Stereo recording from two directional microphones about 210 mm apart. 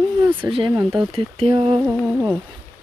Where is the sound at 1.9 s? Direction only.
5° right (ahead or behind).